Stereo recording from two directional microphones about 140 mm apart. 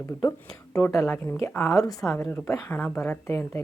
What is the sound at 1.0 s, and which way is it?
A woman's voice, 20° left (ahead or behind).